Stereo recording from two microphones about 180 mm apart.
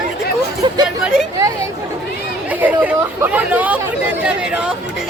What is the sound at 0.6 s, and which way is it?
Speech, 20° right (ahead or behind).